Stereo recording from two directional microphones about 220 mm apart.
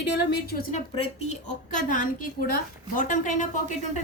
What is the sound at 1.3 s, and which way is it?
A woman's voice, 35° left (ahead or behind).